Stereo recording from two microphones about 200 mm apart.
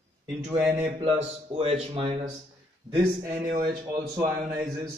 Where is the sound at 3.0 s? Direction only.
15° right (ahead or behind).